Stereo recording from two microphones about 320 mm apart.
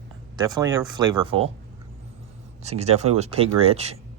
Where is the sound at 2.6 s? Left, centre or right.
Centre.